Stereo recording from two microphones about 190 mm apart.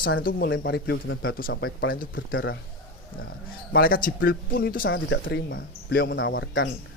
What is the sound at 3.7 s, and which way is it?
Speech, 50° left (ahead or behind).